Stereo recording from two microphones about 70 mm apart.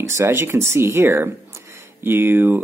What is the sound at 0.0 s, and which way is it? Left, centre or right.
Speech, right.